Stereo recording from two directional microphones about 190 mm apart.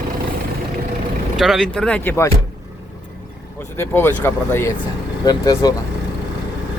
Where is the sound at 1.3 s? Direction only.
Centre (ahead or behind).